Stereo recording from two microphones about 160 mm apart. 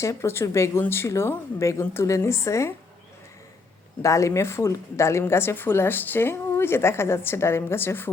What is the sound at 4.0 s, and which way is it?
A woman's voice, 20° left (ahead or behind).